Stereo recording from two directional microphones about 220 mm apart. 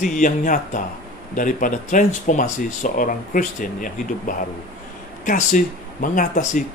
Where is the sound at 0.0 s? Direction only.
35° left (ahead or behind).